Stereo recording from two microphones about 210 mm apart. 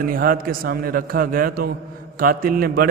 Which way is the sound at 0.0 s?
45° right (ahead or behind).